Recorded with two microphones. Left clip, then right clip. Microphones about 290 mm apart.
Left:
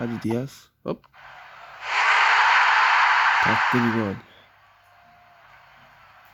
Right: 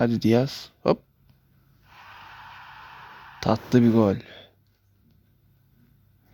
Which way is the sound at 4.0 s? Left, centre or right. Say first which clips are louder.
Right 6 dB; centre.